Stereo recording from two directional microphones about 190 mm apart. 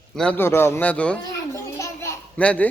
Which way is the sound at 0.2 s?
10° left (ahead or behind).